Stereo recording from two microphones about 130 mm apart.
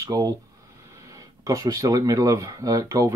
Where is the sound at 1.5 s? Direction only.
25° right (ahead or behind).